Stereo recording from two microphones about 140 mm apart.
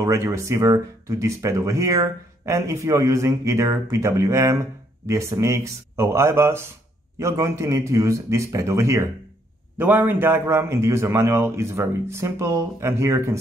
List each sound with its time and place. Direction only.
0.0 s speech: 20° right (ahead or behind)